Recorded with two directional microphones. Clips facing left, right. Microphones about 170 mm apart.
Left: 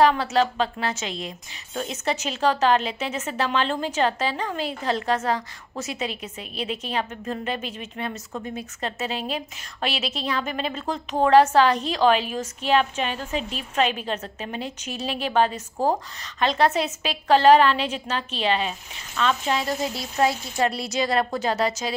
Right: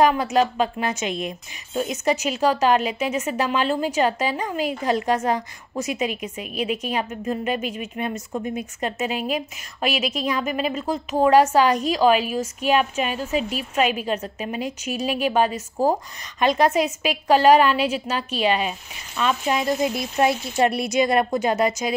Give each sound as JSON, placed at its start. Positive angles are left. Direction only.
{"t": 0.0, "sound": "a woman's voice", "side_deg": -15}